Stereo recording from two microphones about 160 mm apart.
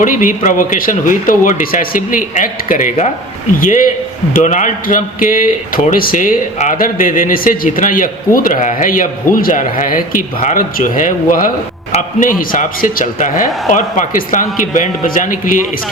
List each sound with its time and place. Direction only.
0.0 s a man's voice: 55° left (ahead or behind)